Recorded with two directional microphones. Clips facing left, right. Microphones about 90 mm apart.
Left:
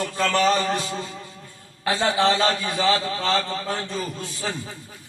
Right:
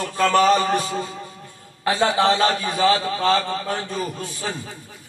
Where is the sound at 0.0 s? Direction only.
25° right (ahead or behind).